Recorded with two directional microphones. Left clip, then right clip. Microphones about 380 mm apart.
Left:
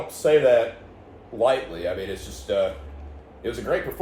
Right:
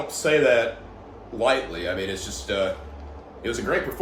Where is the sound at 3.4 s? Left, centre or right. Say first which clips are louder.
Right 2 dB; centre.